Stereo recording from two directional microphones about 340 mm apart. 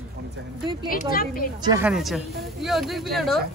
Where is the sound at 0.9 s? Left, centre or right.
Left.